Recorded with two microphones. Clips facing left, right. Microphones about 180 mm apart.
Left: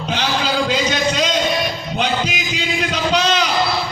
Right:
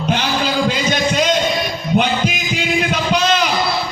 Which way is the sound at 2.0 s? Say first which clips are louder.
Right 3 dB; 55° right (ahead or behind).